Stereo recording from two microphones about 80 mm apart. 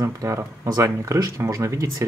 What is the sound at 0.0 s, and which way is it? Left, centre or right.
Speech, right.